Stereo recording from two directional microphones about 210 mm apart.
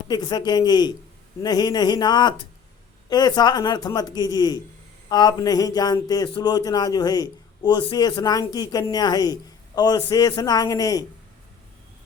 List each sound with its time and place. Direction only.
0.1 s speech: 20° left (ahead or behind)